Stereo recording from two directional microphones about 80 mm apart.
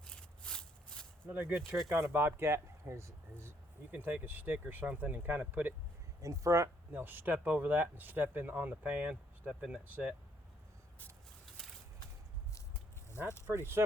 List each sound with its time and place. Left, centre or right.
0.0 s a sound: centre
1.3 s speech: right
1.5 s speech: centre
1.9 s speech: right
3.9 s speech: right
6.2 s speech: right
6.9 s speech: right; by 9.8 s centre
9.8 s speech: centre
13.5 s speech: right